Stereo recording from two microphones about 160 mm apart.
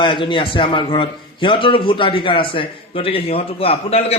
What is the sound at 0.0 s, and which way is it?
A man's voice, 30° left (ahead or behind).